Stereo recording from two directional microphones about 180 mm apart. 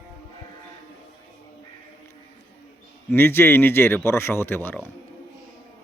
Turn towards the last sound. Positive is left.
turn(degrees=10)  # may be behind; listen again after turning